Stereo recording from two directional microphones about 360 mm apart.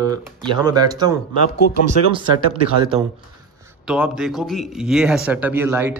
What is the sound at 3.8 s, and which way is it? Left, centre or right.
Speech, centre.